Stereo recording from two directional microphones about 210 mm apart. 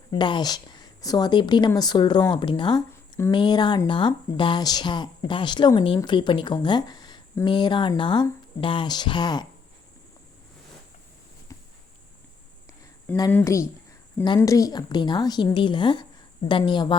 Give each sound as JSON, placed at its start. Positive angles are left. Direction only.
{"t": 0.1, "sound": "speech", "side_deg": 20}
{"t": 13.3, "sound": "speech", "side_deg": 15}